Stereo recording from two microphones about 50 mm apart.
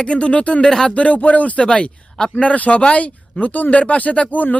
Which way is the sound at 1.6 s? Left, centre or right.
Centre.